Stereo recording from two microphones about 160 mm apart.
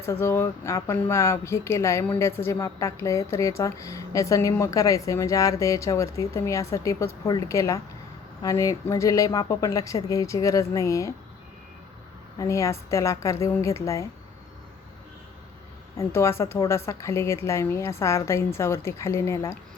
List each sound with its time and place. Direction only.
0.0 s speech: 15° left (ahead or behind)
12.4 s speech: 20° left (ahead or behind)
16.0 s a woman's voice: 15° left (ahead or behind)